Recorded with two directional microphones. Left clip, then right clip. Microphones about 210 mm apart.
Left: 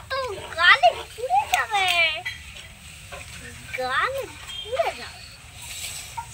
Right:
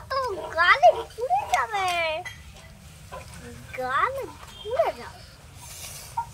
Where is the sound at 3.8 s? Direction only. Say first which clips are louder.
Left 1 dB; 15° right (ahead or behind).